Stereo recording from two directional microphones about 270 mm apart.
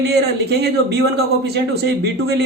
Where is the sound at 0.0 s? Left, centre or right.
Right.